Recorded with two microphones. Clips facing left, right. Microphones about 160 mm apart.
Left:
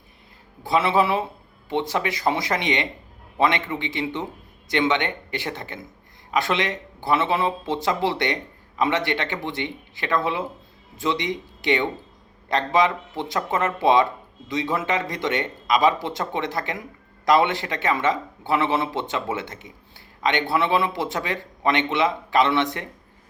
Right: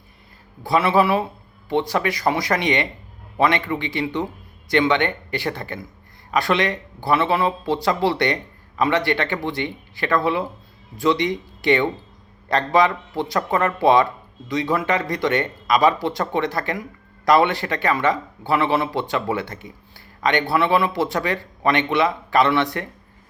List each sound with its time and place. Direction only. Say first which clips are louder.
0.6 s speech: right 2 dB; 20° left (ahead or behind)